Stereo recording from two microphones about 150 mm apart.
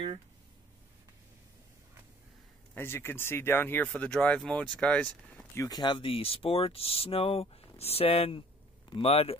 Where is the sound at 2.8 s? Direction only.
15° left (ahead or behind).